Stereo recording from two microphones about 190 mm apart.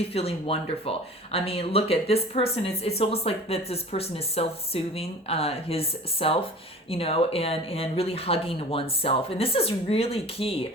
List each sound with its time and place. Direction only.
0.1 s speech: 30° left (ahead or behind)